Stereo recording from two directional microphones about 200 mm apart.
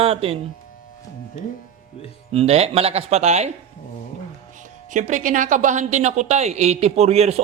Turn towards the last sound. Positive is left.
turn(degrees=-30)  # may be behind; listen again after turning